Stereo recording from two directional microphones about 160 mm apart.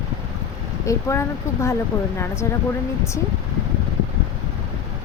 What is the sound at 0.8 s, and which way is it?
Speech, 20° left (ahead or behind).